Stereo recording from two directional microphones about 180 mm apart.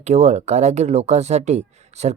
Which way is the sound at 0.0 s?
40° right (ahead or behind).